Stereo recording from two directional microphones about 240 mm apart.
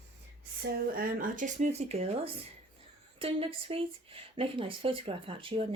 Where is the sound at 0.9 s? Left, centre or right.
Right.